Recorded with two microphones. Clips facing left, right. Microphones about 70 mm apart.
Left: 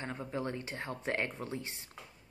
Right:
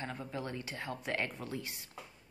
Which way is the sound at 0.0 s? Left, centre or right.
Left.